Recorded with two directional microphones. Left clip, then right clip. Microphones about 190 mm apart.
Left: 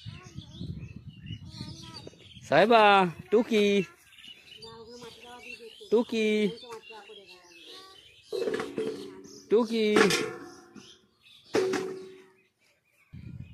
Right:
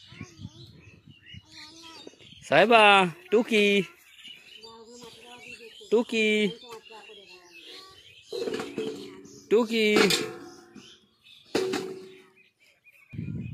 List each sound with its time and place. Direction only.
2.0 s speech: centre (ahead or behind)
4.7 s bird: 30° right (ahead or behind)
5.9 s speech: centre (ahead or behind)
7.6 s music: 5° right (ahead or behind)
8.3 s a sound: 35° right (ahead or behind)
9.5 s speech: centre (ahead or behind)
10.2 s music: 25° right (ahead or behind)
11.5 s a sound: 25° right (ahead or behind)